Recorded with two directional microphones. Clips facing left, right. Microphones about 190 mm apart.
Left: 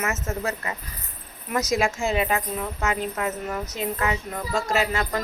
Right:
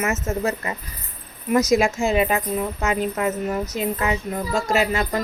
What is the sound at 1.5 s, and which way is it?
A child's voice, 15° right (ahead or behind).